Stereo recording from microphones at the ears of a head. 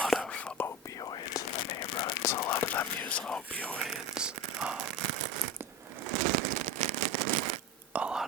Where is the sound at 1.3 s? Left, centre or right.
Left.